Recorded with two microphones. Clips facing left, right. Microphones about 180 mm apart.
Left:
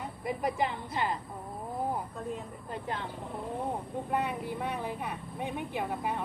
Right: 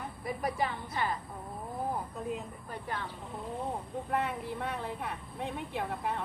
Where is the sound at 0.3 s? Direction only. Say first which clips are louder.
Left 2 dB; 20° left (ahead or behind).